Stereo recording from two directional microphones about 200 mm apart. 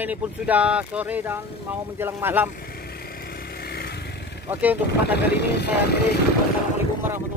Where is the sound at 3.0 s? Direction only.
50° left (ahead or behind).